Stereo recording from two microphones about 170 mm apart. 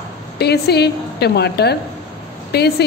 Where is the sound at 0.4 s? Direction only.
75° left (ahead or behind).